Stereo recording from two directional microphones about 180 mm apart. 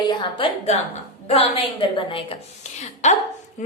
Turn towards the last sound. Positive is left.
turn(degrees=40)  # may be behind; listen again after turning